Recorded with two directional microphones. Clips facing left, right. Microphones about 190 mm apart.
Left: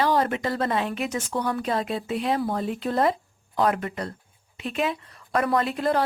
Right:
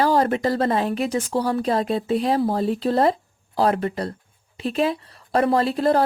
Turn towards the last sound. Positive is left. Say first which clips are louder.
# right 4 dB
turn(degrees=-35)  # may be behind; listen again after turning